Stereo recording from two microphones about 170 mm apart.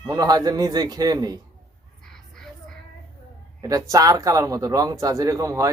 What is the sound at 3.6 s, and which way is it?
A man's voice, 20° right (ahead or behind).